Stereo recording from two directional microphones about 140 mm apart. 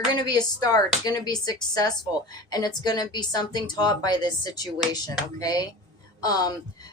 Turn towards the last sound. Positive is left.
turn(degrees=25)  # may be behind; listen again after turning